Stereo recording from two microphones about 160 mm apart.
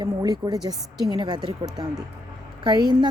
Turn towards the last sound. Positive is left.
turn(degrees=-25)  # may be behind; listen again after turning